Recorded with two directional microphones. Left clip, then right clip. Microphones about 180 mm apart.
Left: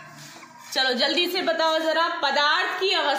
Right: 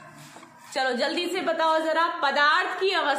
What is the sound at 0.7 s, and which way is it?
A woman's voice, 15° left (ahead or behind).